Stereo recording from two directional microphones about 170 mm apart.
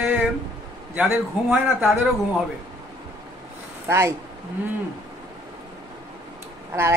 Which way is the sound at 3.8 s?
15° right (ahead or behind).